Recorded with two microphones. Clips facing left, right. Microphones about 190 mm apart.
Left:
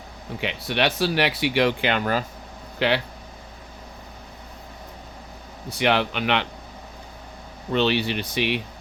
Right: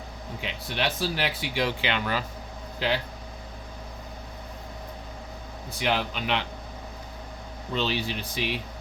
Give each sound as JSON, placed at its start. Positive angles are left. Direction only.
{"t": 0.3, "sound": "speech", "side_deg": 70}
{"t": 2.7, "sound": "speech", "side_deg": 70}
{"t": 5.8, "sound": "speech", "side_deg": 70}
{"t": 7.7, "sound": "speech", "side_deg": 65}